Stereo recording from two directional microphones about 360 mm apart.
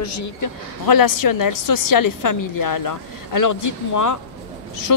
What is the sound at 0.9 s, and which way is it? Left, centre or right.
A woman's voice, left.